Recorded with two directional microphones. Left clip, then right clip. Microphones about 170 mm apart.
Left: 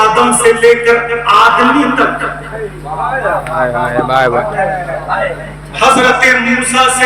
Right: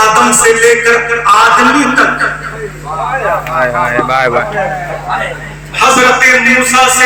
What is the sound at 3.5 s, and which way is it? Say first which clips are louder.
Speech: right 2 dB; 10° left (ahead or behind).